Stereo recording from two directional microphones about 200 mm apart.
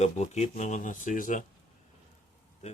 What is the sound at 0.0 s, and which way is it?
Speech, 35° left (ahead or behind).